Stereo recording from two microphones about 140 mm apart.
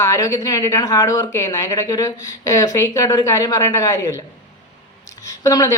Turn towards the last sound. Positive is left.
turn(degrees=25)  # may be behind; listen again after turning